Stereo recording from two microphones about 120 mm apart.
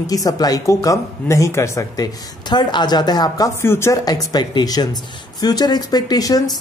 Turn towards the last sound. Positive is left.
turn(degrees=30)  # may be behind; listen again after turning